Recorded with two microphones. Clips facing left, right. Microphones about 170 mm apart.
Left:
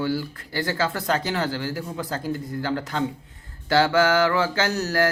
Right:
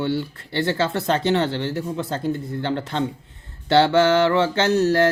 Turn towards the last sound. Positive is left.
turn(degrees=-25)  # may be behind; listen again after turning